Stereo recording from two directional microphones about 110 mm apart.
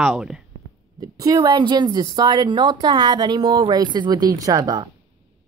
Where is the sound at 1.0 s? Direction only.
30° right (ahead or behind).